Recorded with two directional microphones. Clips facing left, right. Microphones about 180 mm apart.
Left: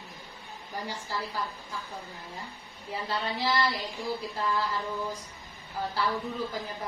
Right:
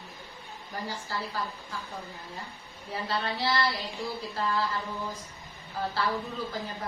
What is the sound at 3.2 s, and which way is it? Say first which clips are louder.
A woman's voice: left 1 dB; 20° left (ahead or behind).